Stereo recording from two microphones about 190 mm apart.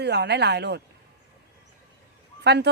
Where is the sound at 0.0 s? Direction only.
60° right (ahead or behind).